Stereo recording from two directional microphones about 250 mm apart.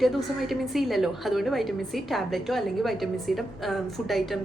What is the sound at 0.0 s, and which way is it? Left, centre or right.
A woman's voice, centre.